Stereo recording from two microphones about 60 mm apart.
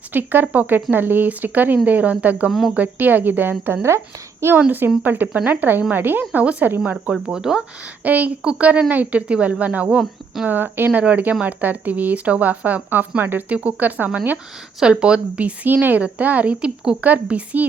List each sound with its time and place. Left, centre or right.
0.1 s speech: right
2.5 s speech: centre
2.7 s speech: right
3.8 s a woman's voice: right
5.0 s speech: right
6.4 s speech: right
6.7 s speech: right
7.1 s speech: centre
8.0 s speech: right
14.8 s speech: centre